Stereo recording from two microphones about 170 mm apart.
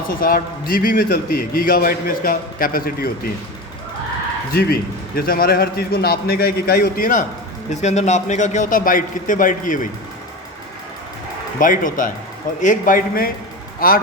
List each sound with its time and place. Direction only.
0.1 s a man's voice: 60° left (ahead or behind)
4.5 s a man's voice: 65° left (ahead or behind)
7.7 s a man's voice: 45° left (ahead or behind)
11.6 s a man's voice: 50° left (ahead or behind)